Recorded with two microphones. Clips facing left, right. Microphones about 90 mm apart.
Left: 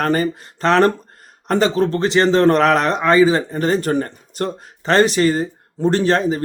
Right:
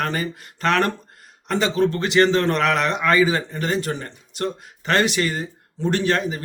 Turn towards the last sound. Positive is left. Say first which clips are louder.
# left 5 dB
turn(degrees=35)  # may be behind; listen again after turning